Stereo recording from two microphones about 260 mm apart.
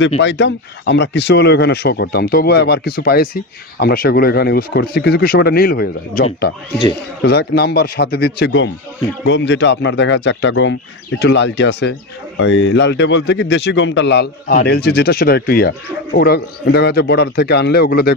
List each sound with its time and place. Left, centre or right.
0.2 s speech: left